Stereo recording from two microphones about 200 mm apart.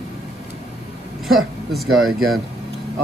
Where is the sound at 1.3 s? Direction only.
Centre (ahead or behind).